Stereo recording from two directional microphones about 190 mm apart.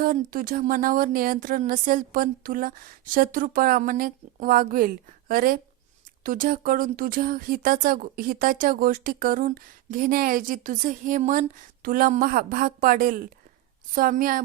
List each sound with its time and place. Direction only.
0.0 s speech: 45° right (ahead or behind)